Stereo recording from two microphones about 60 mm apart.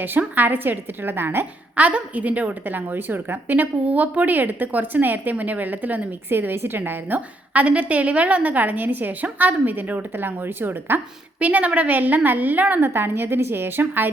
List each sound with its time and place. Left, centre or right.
0.2 s a woman's voice: right
1.7 s a woman's voice: right
7.5 s a woman's voice: right
11.3 s a woman's voice: right
12.8 s a woman's voice: right